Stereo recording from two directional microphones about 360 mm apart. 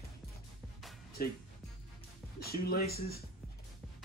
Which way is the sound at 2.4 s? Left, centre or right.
Left.